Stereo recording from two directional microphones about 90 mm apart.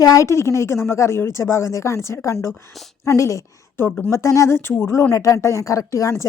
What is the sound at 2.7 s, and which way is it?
Speech, centre (ahead or behind).